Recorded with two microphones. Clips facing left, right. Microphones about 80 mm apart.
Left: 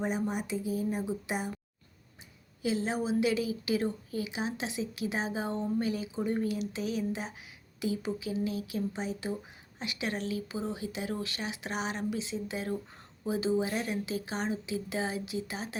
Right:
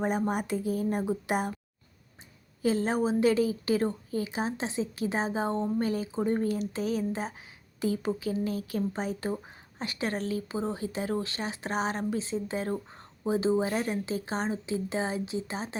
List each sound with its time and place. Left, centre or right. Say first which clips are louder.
0.0 s speech: right 4 dB; right
2.6 s speech: right 4 dB; right